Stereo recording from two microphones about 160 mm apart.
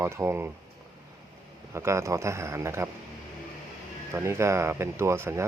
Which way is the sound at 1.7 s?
15° right (ahead or behind).